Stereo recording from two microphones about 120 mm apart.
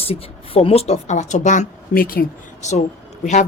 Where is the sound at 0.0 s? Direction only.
55° left (ahead or behind); by 1.6 s 85° left.